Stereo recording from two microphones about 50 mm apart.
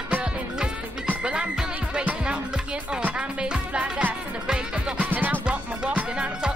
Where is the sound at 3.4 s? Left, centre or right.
Centre.